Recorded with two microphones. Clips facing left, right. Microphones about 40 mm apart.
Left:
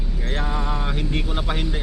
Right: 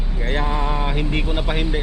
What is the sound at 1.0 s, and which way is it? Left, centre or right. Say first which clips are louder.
Speech: right 3 dB; right.